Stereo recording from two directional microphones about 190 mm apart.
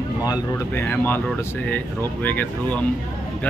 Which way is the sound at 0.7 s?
10° left (ahead or behind).